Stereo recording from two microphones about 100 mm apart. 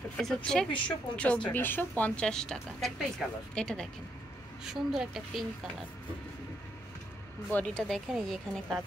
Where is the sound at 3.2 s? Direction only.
5° right (ahead or behind).